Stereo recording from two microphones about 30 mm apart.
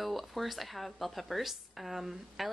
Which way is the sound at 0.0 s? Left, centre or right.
Centre.